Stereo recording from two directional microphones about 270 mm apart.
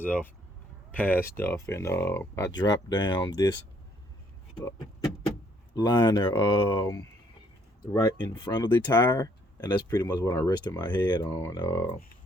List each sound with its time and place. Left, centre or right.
0.0 s speech: centre
5.7 s speech: centre